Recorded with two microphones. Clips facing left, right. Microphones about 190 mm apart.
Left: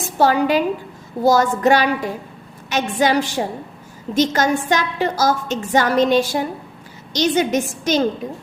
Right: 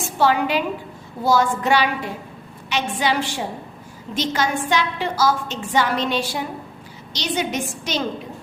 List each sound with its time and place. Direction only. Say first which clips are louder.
0.2 s a woman's voice: left 3 dB; 45° left (ahead or behind)